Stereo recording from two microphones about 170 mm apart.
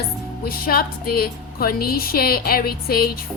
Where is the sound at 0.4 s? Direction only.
60° left (ahead or behind).